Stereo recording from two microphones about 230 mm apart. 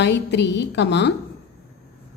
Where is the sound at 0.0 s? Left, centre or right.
Left.